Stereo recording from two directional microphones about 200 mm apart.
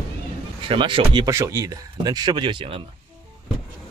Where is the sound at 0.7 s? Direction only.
25° right (ahead or behind).